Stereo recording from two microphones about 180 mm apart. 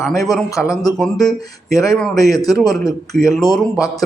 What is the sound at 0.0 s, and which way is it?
Speech, centre (ahead or behind).